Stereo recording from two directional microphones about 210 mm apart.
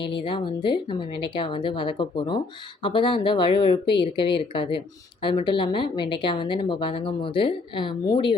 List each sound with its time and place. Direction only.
0.0 s a woman's voice: 25° left (ahead or behind)